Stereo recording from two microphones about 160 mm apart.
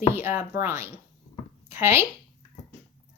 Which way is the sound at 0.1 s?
15° right (ahead or behind).